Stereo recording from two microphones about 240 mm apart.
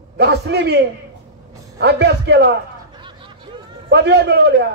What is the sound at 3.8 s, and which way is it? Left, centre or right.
Speech, right.